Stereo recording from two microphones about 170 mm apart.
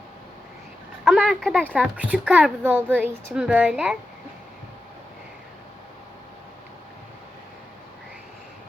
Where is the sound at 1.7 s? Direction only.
10° right (ahead or behind).